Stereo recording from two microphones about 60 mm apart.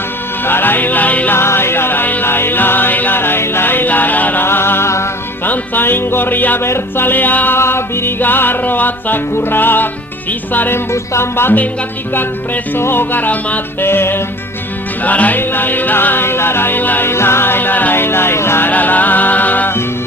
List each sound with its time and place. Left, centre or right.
0.4 s music: left
1.3 s music: left
4.4 s music: left
5.5 s music: left
10.9 s music: left
12.7 s music: left
13.8 s music: left
15.0 s music: left
17.1 s music: left
18.7 s music: left